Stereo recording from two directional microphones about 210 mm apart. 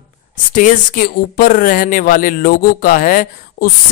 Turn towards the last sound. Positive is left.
turn(degrees=40)  # may be behind; listen again after turning